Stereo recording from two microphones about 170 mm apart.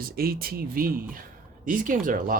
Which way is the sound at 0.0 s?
60° right (ahead or behind).